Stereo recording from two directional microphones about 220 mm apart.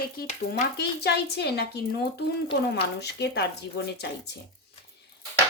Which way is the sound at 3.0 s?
50° left (ahead or behind).